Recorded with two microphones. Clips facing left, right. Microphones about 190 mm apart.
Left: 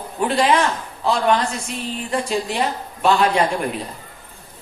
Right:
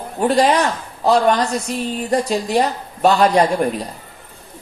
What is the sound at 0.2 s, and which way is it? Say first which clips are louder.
A woman's voice: right 3 dB; 40° right (ahead or behind).